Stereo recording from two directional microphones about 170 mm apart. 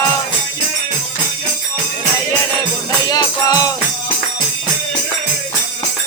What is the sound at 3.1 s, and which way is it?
Music, 20° left (ahead or behind).